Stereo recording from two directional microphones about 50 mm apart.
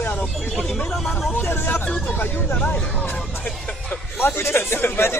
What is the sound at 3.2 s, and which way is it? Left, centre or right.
Music, left.